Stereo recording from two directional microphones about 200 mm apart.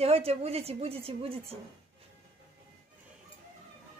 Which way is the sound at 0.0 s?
30° right (ahead or behind).